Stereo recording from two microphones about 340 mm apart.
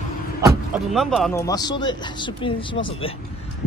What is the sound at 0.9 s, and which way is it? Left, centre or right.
Speech, centre.